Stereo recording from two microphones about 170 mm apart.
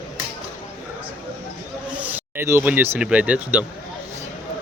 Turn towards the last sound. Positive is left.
turn(degrees=-10)  # may be behind; listen again after turning